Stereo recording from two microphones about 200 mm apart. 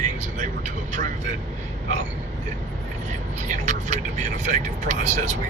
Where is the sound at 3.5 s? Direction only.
35° right (ahead or behind).